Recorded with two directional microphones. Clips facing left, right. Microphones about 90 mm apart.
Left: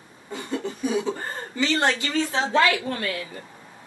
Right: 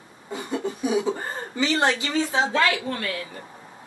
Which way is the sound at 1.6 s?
20° right (ahead or behind).